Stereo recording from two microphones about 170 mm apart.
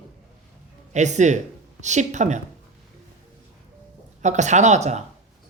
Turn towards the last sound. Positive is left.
turn(degrees=-40)  # may be behind; listen again after turning